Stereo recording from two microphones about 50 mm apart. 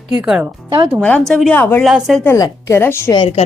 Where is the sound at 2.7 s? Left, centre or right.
Left.